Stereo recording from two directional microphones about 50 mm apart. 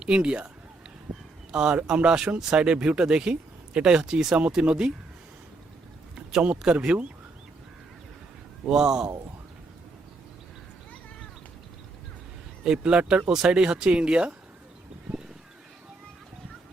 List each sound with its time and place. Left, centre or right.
0.0 s speech: centre
1.5 s speech: centre
6.1 s speech: right
8.6 s speech: centre
12.6 s speech: centre
13.3 s speech: centre